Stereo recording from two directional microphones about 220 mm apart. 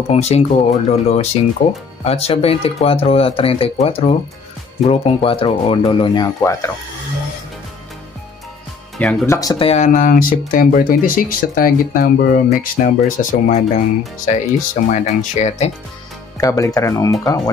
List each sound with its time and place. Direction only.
0.1 s speech: 30° left (ahead or behind); by 6.7 s 15° left (ahead or behind)
8.9 s speech: 5° left (ahead or behind); by 15.7 s 30° left (ahead or behind)
16.3 s speech: 15° left (ahead or behind)